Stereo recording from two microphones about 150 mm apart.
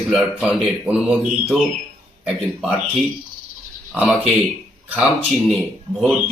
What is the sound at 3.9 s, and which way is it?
Speech, centre (ahead or behind).